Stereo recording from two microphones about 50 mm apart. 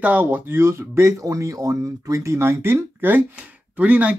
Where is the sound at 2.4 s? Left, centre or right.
Right.